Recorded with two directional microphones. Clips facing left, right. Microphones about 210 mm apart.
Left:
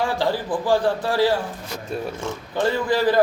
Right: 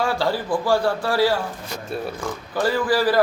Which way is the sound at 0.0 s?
15° left (ahead or behind).